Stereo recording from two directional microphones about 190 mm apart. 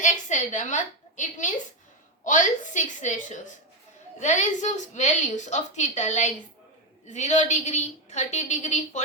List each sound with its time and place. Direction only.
0.0 s a woman's voice: 40° left (ahead or behind)